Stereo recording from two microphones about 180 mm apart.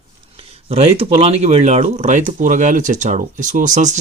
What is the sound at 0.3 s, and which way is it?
Speech, 35° right (ahead or behind).